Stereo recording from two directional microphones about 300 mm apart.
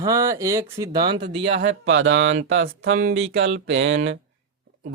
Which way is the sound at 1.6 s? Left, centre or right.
Right.